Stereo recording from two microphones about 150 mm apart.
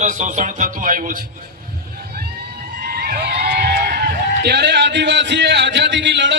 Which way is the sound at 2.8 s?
90° right.